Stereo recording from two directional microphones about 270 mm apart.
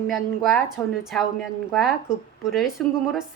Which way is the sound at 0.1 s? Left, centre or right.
Centre.